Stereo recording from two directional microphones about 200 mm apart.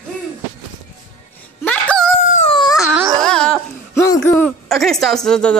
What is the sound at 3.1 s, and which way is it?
Babbling, 5° left (ahead or behind).